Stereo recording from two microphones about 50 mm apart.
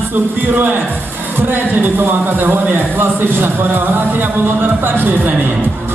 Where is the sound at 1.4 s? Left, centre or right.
Right.